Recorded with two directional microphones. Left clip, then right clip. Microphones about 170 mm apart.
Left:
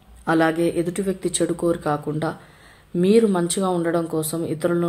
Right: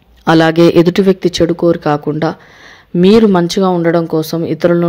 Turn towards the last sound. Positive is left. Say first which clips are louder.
# right 10 dB
turn(degrees=-40)  # may be behind; listen again after turning